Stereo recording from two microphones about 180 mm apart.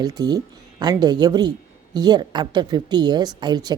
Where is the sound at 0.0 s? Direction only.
20° right (ahead or behind).